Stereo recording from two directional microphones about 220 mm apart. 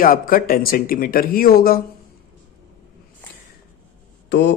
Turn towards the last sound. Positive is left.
turn(degrees=50)  # may be behind; listen again after turning